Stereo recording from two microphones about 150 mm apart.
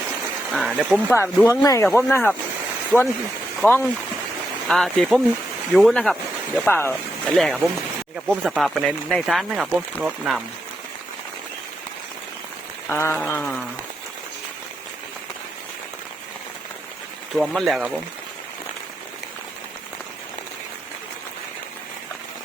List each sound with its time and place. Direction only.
0.5 s speech: 5° right (ahead or behind)
0.9 s speech: 15° left (ahead or behind)
3.6 s speech: 15° left (ahead or behind)
4.7 s speech: centre (ahead or behind)
7.3 s speech: centre (ahead or behind)
12.9 s speech: 15° left (ahead or behind)
17.3 s speech: centre (ahead or behind)